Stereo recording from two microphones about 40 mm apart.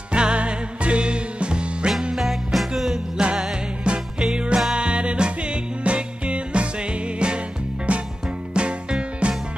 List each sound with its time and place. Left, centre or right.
0.1 s music: right
2.1 s music: centre
3.8 s music: right